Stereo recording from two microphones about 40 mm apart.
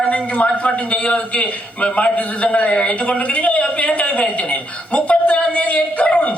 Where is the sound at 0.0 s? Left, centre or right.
Left.